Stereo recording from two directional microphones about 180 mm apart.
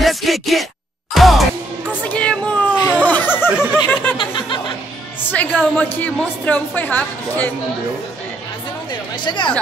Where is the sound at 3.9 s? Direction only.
10° left (ahead or behind).